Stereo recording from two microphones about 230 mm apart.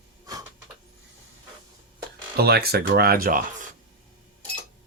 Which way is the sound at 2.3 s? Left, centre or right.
Right.